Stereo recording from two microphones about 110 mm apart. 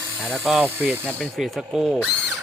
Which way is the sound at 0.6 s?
15° right (ahead or behind).